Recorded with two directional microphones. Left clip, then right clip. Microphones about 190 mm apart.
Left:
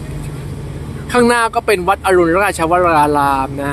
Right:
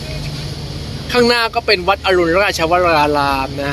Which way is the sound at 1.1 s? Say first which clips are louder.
Left 1 dB; 15° left (ahead or behind).